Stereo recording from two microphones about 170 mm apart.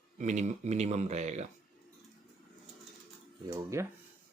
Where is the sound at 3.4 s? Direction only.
15° right (ahead or behind).